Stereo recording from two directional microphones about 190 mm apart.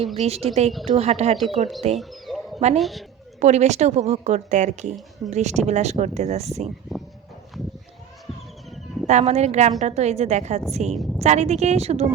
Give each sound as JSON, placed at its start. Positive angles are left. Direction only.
{"t": 0.2, "sound": "a woman's voice", "side_deg": -35}
{"t": 2.0, "sound": "a sound", "side_deg": 0}
{"t": 2.7, "sound": "a woman's voice", "side_deg": 0}
{"t": 3.4, "sound": "a woman's voice", "side_deg": -35}
{"t": 9.0, "sound": "a woman's voice", "side_deg": -35}